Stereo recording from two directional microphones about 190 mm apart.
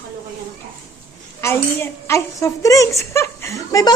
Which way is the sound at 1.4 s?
15° left (ahead or behind).